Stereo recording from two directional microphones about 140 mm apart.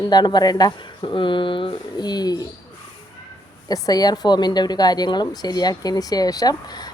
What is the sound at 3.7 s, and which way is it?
A woman's voice, 25° left (ahead or behind).